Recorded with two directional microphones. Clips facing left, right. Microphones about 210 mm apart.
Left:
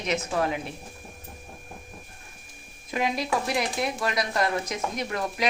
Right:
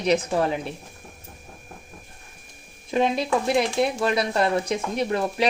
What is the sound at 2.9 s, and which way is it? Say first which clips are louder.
Speech: right 5 dB; 25° right (ahead or behind).